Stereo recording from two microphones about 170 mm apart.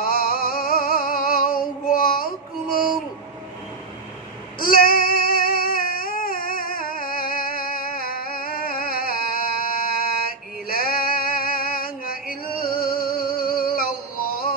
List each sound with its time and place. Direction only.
0.0 s music: 60° left (ahead or behind)
4.6 s child singing: 60° left (ahead or behind)